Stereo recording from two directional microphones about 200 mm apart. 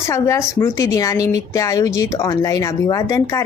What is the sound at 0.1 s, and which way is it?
Speech, 15° left (ahead or behind).